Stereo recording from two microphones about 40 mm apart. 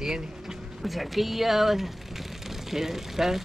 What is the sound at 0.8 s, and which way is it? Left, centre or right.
Speech, centre.